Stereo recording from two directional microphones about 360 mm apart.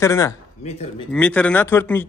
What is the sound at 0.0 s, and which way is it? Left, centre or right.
A man's voice, centre.